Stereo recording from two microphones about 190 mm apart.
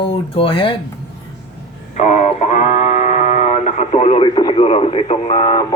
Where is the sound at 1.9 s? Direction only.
35° left (ahead or behind).